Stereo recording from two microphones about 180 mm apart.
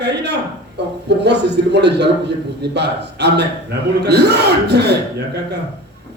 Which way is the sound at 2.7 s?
70° right (ahead or behind).